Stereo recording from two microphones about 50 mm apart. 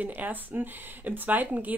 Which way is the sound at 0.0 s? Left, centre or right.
Right.